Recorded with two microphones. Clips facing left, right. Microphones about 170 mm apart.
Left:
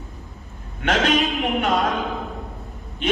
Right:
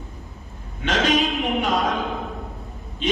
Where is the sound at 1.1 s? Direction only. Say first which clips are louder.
Even; centre (ahead or behind).